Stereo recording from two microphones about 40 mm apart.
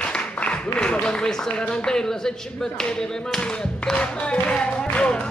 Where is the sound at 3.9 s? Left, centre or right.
Left.